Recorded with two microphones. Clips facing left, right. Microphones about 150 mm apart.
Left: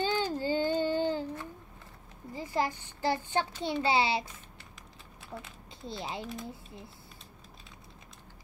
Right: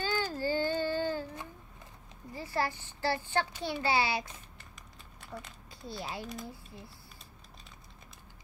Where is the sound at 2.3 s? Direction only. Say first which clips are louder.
Left 2 dB; 15° left (ahead or behind).